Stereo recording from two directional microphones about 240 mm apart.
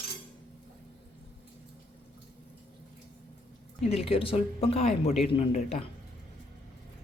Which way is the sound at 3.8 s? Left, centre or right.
Left.